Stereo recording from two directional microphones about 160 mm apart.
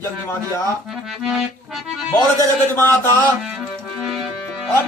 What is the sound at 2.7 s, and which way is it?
Speech, 15° left (ahead or behind).